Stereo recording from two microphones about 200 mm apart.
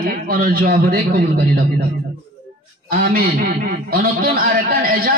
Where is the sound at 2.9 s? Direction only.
50° right (ahead or behind).